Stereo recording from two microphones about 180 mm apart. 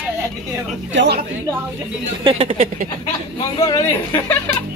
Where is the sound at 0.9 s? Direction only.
70° right (ahead or behind).